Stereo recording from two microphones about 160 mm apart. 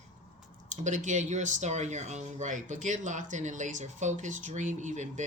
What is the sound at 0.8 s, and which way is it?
Speech, 50° right (ahead or behind).